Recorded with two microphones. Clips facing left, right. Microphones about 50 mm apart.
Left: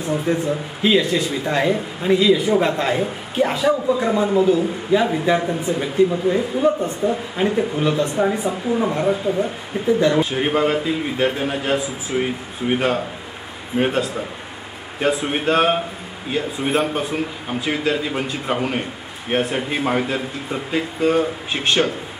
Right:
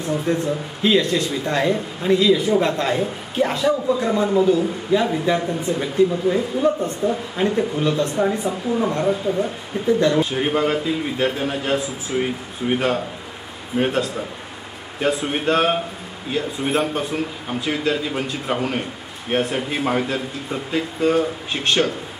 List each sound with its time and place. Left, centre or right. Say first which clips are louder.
0.0 s speech: left 1 dB; centre